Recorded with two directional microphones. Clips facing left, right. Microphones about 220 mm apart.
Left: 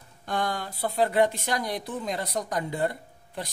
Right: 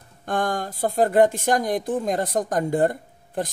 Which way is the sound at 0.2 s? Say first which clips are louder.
Right 5 dB; 50° right (ahead or behind).